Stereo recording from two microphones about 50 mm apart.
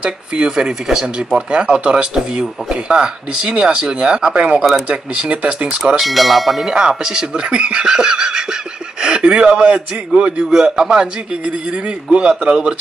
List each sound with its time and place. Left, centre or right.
0.0 s speech: centre
5.8 s speech: centre
6.7 s speech: centre
10.5 s speech: centre
11.4 s speech: right